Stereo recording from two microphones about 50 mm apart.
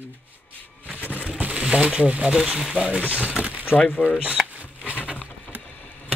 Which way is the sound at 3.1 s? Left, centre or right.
Right.